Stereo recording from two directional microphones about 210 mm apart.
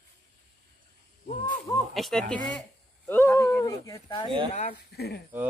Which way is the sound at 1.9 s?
Centre (ahead or behind).